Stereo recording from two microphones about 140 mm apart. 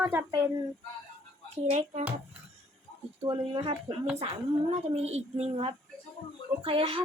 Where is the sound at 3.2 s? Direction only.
35° right (ahead or behind).